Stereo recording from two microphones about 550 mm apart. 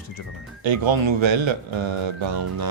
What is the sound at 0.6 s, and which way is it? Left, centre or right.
Speech, right.